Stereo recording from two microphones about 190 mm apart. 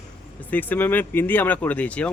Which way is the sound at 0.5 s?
10° left (ahead or behind).